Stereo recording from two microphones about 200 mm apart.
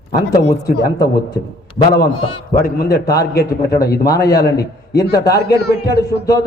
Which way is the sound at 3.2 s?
50° left (ahead or behind).